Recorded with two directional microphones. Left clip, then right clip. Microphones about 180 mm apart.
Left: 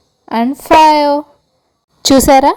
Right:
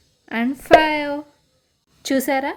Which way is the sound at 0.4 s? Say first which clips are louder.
Left 7 dB; 20° left (ahead or behind).